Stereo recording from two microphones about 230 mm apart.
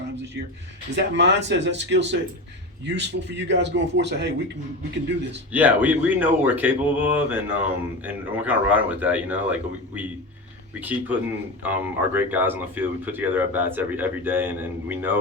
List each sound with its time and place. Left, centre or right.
0.9 s a man's voice: right
5.5 s speech: centre